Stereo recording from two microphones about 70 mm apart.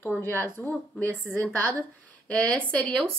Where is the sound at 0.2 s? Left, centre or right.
Left.